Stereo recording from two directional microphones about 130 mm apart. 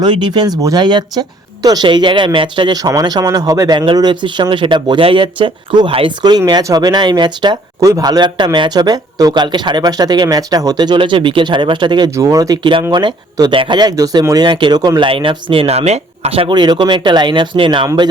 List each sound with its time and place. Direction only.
0.0 s speech: 35° right (ahead or behind)
12.1 s speech: 25° right (ahead or behind)